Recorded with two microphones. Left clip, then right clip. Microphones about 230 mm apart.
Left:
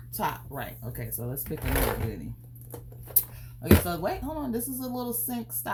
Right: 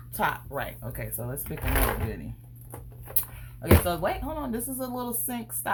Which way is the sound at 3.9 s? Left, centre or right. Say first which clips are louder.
Right 2 dB; right.